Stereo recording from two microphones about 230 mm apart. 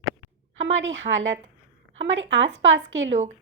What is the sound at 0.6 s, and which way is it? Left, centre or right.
Speech, right.